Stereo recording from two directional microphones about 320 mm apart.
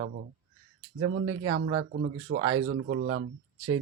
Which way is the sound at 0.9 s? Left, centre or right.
Right.